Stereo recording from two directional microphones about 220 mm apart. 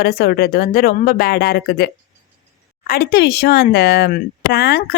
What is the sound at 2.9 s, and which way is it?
A woman's voice, 45° left (ahead or behind).